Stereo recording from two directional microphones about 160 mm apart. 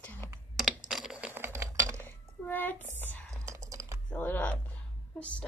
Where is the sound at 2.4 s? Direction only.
10° left (ahead or behind).